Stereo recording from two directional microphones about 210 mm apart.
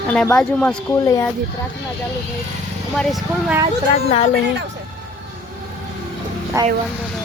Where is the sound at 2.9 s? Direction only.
Centre (ahead or behind).